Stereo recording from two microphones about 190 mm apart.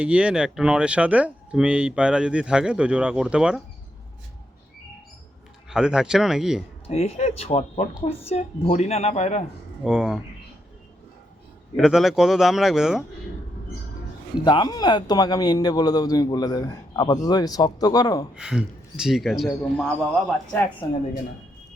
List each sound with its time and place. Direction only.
0.0 s speech: 5° right (ahead or behind)
5.6 s speech: 5° right (ahead or behind)
6.8 s speech: 30° left (ahead or behind)
9.8 s speech: 5° right (ahead or behind)
11.8 s speech: centre (ahead or behind)
14.4 s speech: 20° left (ahead or behind)
18.3 s a man's voice: 5° right (ahead or behind)
20.8 s speech: 20° left (ahead or behind)